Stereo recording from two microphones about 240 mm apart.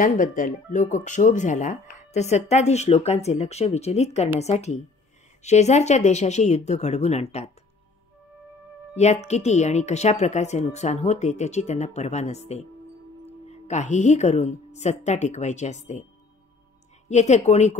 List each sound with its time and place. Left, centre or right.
0.0 s speech: left
8.9 s speech: left
17.1 s speech: left